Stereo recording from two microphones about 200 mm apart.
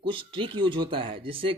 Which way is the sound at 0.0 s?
25° right (ahead or behind).